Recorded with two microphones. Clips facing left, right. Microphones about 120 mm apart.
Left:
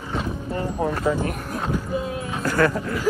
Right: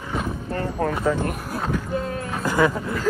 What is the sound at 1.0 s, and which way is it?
Speech, 5° left (ahead or behind).